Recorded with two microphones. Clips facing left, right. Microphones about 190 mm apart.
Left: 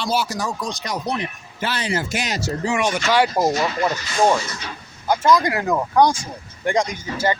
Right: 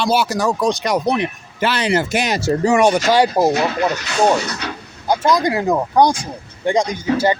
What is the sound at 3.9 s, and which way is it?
Speech, 70° right (ahead or behind).